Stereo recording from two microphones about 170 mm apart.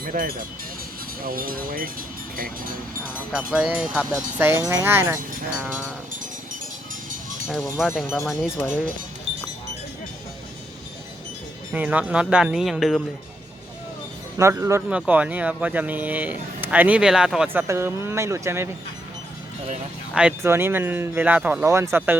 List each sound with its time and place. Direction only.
0.0 s speech: 55° right (ahead or behind)
3.5 s speech: 5° right (ahead or behind)
8.3 s speech: 5° right (ahead or behind)
8.5 s speech: 10° left (ahead or behind)
11.7 s speech: 10° right (ahead or behind)
14.3 s speech: 15° right (ahead or behind)
20.1 s speech: 10° right (ahead or behind)